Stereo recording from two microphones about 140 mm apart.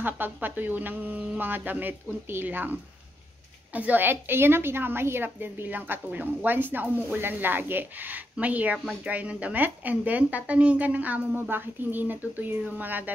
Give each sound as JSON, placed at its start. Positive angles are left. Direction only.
{"t": 0.0, "sound": "a woman's voice", "side_deg": -15}